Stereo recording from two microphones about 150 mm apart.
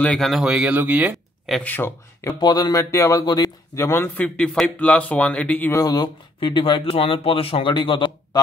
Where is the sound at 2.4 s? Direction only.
25° left (ahead or behind).